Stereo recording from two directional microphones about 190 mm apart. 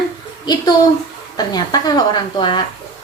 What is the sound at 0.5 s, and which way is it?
A woman's voice, 20° left (ahead or behind).